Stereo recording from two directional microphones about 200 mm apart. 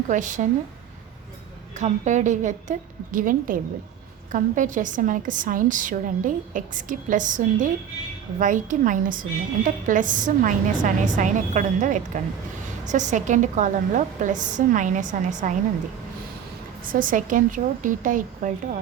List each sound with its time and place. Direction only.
0.1 s a woman's voice: 40° right (ahead or behind)
1.8 s a woman's voice: 35° right (ahead or behind)
16.9 s a woman's voice: 40° right (ahead or behind)